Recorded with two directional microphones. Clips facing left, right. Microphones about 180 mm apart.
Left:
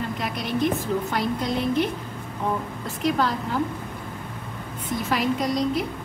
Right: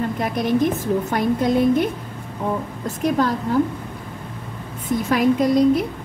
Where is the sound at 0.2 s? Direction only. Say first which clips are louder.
Right 6 dB; 50° right (ahead or behind).